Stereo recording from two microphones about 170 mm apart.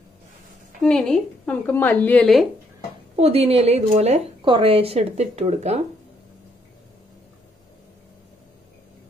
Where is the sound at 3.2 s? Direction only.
35° right (ahead or behind).